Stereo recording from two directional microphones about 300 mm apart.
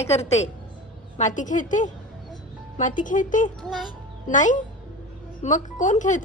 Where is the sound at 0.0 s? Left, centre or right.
Left.